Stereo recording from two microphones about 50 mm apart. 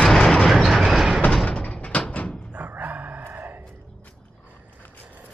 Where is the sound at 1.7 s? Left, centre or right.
Left.